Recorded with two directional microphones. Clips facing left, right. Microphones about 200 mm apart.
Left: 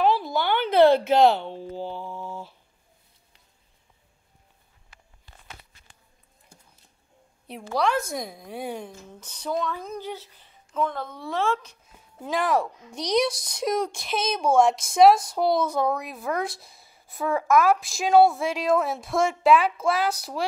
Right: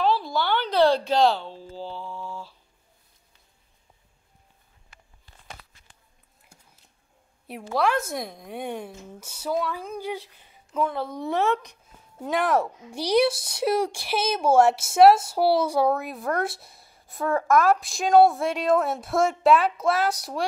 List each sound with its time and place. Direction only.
0.0 s a sound: 20° left (ahead or behind)
0.7 s speech: 20° left (ahead or behind)
1.7 s mantra: 15° left (ahead or behind)
7.4 s a woman's voice: centre (ahead or behind)
11.1 s a woman's voice: 20° right (ahead or behind)
12.2 s speech: centre (ahead or behind)